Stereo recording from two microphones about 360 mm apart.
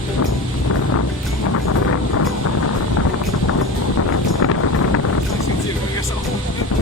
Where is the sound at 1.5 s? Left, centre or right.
Left.